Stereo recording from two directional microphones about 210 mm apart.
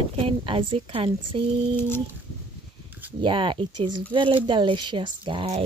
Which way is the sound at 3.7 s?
90° right.